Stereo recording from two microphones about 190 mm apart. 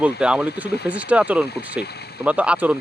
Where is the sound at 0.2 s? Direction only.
5° right (ahead or behind).